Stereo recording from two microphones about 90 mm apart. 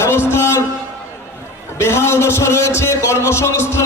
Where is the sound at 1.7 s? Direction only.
30° left (ahead or behind).